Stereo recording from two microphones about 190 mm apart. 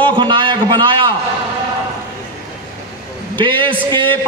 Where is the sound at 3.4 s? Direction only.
25° right (ahead or behind).